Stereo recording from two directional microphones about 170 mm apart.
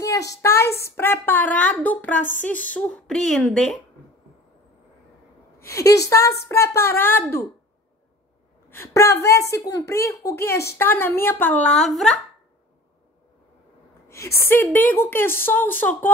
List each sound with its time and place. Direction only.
0.0 s a woman's voice: 20° left (ahead or behind); by 3.7 s 5° left (ahead or behind)
5.6 s a woman's voice: 15° left (ahead or behind)
8.6 s a woman's voice: 15° left (ahead or behind)
14.0 s a woman's voice: 15° left (ahead or behind)